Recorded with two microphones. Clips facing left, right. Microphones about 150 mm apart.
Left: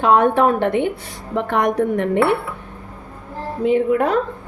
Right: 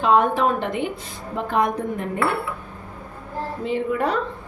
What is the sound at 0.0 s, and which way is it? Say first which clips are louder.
A woman's voice: left 4 dB; 65° left (ahead or behind).